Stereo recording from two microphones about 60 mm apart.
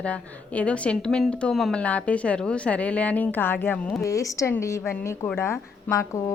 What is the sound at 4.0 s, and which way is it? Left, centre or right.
A woman's voice, left.